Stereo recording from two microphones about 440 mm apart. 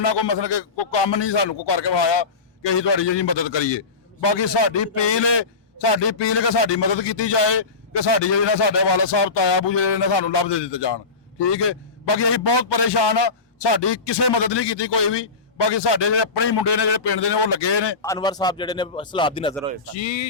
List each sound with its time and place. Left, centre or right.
0.0 s a man's voice: left
18.0 s speech: centre
20.0 s speech: left